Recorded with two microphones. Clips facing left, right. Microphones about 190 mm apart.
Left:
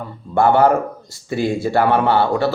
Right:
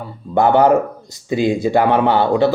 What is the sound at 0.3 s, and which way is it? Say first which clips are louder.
A man's voice: right 2 dB; 15° right (ahead or behind).